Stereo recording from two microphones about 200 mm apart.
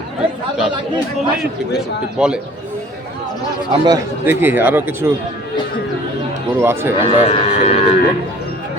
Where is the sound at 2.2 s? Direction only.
5° right (ahead or behind).